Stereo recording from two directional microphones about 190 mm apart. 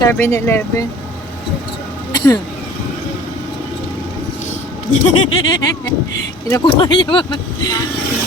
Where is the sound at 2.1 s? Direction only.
20° left (ahead or behind).